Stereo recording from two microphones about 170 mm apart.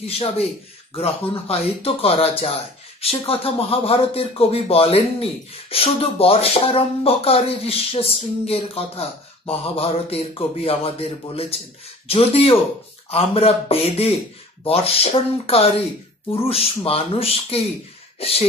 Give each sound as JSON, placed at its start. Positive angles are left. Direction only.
{"t": 0.0, "sound": "speech", "side_deg": 35}